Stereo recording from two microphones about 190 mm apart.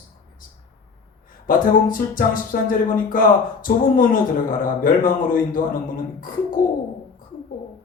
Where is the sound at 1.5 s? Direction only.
45° left (ahead or behind).